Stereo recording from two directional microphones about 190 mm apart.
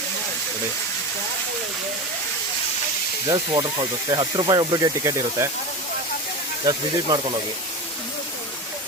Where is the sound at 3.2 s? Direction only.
20° right (ahead or behind).